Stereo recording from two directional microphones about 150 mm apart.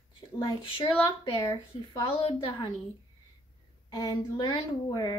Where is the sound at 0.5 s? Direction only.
35° left (ahead or behind).